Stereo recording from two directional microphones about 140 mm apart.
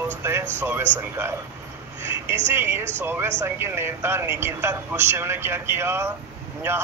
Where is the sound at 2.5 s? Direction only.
15° right (ahead or behind).